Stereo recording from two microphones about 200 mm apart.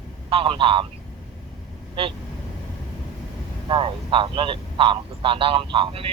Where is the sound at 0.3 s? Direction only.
25° right (ahead or behind).